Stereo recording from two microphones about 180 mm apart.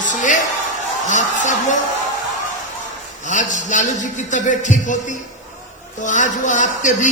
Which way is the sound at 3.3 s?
40° left (ahead or behind).